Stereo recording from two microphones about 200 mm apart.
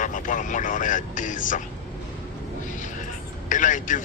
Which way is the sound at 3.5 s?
40° left (ahead or behind).